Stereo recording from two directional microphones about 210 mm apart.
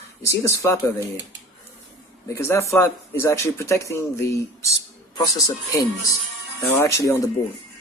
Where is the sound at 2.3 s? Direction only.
15° left (ahead or behind).